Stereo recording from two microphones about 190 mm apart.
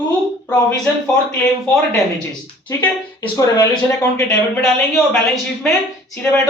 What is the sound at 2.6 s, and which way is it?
Speech, 20° left (ahead or behind).